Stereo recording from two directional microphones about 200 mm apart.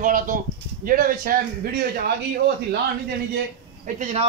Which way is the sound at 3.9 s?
35° right (ahead or behind).